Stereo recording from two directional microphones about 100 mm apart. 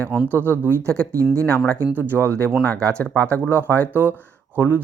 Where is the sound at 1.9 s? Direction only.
20° right (ahead or behind).